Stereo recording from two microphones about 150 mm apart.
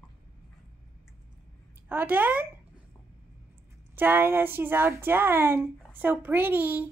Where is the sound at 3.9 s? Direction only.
15° right (ahead or behind).